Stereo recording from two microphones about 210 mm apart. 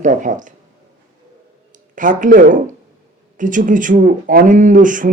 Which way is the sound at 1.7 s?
40° right (ahead or behind).